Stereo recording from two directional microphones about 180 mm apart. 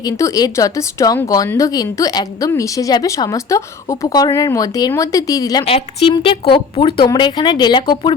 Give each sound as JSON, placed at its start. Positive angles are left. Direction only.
{"t": 0.0, "sound": "speech", "side_deg": 20}
{"t": 5.6, "sound": "a woman's voice", "side_deg": 30}